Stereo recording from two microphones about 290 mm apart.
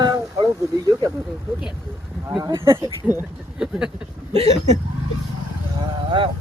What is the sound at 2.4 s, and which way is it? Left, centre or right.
Speech, centre.